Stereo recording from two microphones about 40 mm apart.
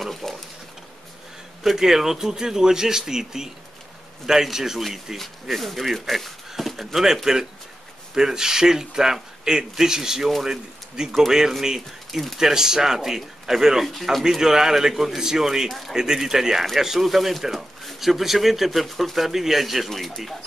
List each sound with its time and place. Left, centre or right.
0.0 s a sound: centre
1.6 s speech: centre
12.1 s speech: centre
12.4 s speech: centre